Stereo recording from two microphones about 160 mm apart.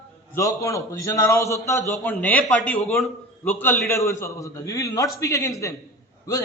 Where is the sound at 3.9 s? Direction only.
20° left (ahead or behind).